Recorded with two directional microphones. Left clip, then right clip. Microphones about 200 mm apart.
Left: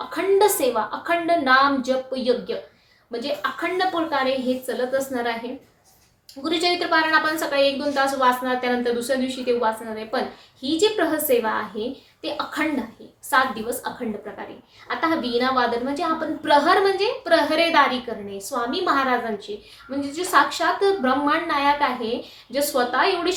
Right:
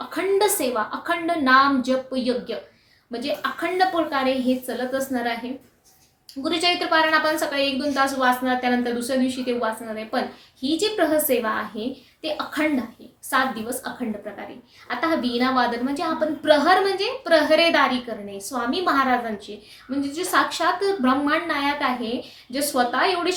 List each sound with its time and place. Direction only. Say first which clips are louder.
0.1 s a woman's voice: left 2 dB; 10° right (ahead or behind)
6.4 s a woman's voice: even; 10° right (ahead or behind)
14.8 s a woman's voice: even; 10° right (ahead or behind)